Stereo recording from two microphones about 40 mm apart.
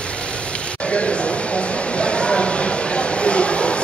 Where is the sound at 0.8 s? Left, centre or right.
Left.